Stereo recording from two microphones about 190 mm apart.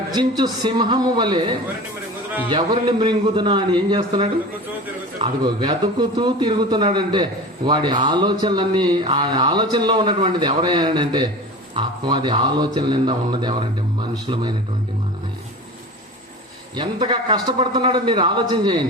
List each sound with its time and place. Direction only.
0.1 s speech: 20° right (ahead or behind)
16.7 s speech: 25° right (ahead or behind)